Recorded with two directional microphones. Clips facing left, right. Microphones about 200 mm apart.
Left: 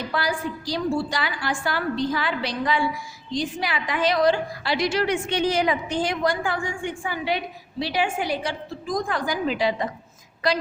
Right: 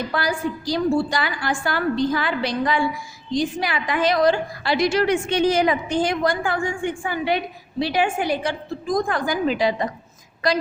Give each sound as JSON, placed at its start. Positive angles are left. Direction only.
{"t": 0.1, "sound": "a woman's voice", "side_deg": -45}